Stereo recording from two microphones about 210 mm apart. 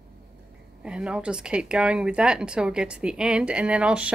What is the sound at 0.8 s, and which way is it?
A woman's voice, 5° right (ahead or behind).